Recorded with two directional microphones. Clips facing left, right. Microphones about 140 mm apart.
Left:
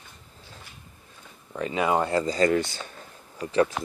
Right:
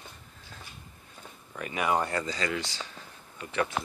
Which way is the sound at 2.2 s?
45° left (ahead or behind).